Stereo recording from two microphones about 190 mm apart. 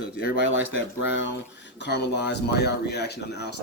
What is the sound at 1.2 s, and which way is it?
Speech, 65° left (ahead or behind).